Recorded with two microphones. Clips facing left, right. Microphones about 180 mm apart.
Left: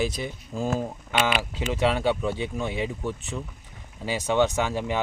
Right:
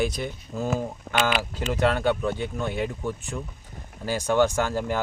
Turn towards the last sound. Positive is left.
turn(degrees=0)  # may be behind; listen again after turning